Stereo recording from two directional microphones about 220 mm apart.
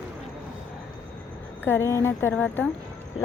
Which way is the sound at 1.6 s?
10° left (ahead or behind).